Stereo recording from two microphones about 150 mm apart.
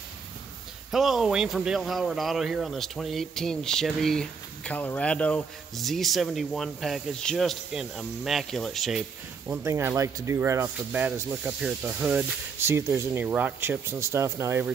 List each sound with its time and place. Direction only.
0.9 s speech: centre (ahead or behind)
9.5 s speech: 20° right (ahead or behind)